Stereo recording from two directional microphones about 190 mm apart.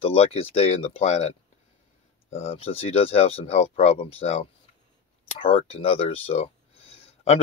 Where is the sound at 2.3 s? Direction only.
35° left (ahead or behind).